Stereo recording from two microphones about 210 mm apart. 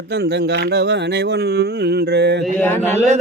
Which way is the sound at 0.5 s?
55° right (ahead or behind).